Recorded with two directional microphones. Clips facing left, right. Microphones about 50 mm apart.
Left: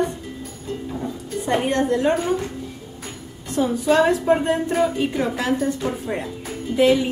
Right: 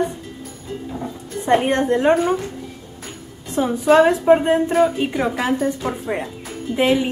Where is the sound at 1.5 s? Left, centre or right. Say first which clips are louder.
Right 4 dB; right.